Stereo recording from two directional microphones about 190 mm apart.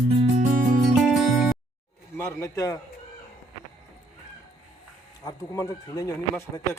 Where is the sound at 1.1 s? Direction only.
Centre (ahead or behind).